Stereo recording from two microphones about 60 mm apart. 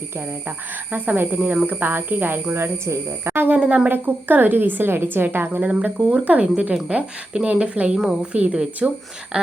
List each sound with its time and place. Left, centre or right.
0.4 s speech: right
3.6 s speech: right
5.6 s a woman's voice: centre